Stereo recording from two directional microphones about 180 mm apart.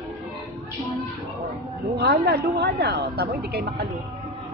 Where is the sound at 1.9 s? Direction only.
65° right (ahead or behind).